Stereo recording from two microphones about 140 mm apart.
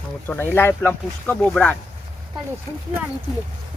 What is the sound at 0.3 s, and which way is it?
Speech, 15° left (ahead or behind).